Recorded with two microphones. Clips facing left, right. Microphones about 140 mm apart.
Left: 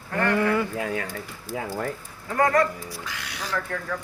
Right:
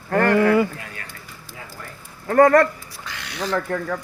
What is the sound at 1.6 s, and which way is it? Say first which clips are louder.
Speech: left 10 dB; 65° left (ahead or behind).